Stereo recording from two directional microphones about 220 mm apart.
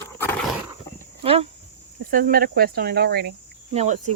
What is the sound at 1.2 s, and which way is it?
Speech, 25° right (ahead or behind).